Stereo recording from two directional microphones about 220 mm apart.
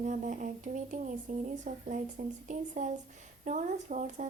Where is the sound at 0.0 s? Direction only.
35° right (ahead or behind).